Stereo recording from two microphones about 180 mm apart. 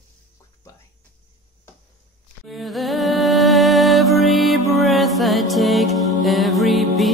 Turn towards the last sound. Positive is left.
turn(degrees=0)  # may be behind; listen again after turning